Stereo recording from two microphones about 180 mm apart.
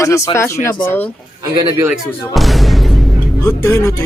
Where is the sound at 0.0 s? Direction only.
15° left (ahead or behind).